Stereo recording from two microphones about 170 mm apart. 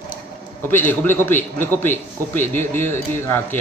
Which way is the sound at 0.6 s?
10° left (ahead or behind).